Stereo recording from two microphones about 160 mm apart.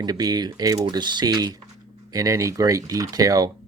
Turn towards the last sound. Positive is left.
turn(degrees=-20)  # may be behind; listen again after turning